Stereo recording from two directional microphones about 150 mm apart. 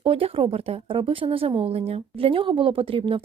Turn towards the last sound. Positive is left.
turn(degrees=-35)  # may be behind; listen again after turning